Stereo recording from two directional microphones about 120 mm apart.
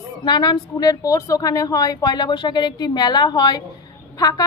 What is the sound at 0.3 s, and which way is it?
A woman's voice, 35° left (ahead or behind).